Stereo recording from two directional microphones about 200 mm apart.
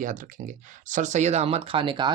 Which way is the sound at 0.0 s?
40° right (ahead or behind).